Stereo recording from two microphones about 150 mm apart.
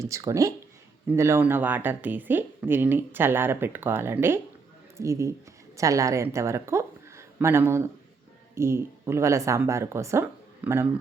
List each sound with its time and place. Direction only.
0.0 s a woman's voice: 20° right (ahead or behind)